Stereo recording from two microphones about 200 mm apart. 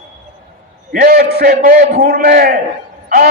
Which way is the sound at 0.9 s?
45° right (ahead or behind).